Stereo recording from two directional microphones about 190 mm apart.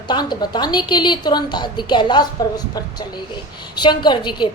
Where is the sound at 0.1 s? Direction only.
20° left (ahead or behind).